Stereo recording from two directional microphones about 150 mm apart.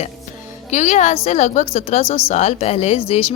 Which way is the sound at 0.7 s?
55° left (ahead or behind).